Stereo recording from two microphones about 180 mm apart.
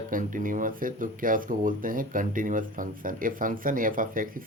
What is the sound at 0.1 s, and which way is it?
Speech, 50° right (ahead or behind).